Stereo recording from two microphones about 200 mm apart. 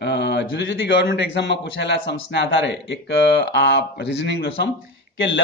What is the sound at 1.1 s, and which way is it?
A man's voice, 60° left (ahead or behind).